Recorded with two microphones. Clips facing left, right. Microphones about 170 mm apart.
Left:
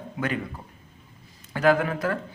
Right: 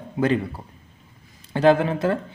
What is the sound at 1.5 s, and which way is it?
Speech, 30° right (ahead or behind).